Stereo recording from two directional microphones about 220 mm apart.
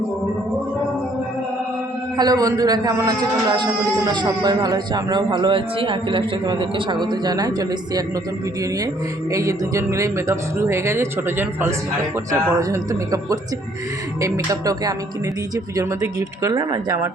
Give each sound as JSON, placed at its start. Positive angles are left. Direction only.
{"t": 2.1, "sound": "a man's voice", "side_deg": -15}
{"t": 9.3, "sound": "a man's voice", "side_deg": -15}